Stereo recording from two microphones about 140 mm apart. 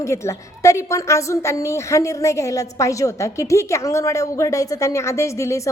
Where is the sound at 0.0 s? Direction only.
20° left (ahead or behind).